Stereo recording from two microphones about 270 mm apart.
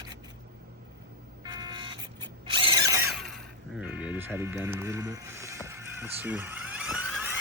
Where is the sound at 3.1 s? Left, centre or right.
Centre.